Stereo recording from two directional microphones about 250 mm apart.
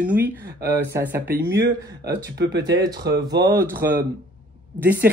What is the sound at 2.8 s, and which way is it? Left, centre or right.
Speech, centre.